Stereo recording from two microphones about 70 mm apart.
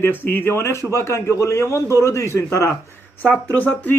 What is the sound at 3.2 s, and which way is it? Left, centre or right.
Speech, left.